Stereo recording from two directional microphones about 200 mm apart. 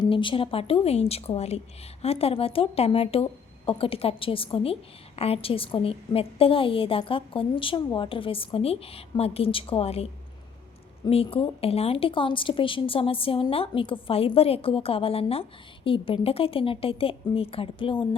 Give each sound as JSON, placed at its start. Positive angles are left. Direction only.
{"t": 0.0, "sound": "speech", "side_deg": 25}